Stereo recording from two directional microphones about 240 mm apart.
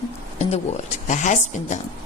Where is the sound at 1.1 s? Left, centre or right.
Left.